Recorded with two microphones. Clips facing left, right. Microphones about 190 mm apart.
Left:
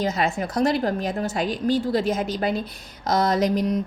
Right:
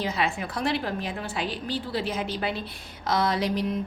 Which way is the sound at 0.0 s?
45° left (ahead or behind).